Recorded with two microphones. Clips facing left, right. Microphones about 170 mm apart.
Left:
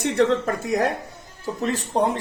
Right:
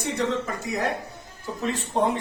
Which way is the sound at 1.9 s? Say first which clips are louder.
Left 2 dB; 40° left (ahead or behind).